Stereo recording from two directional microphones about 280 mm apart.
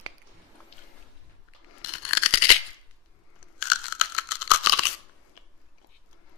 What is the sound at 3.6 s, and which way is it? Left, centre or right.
Tearing, left.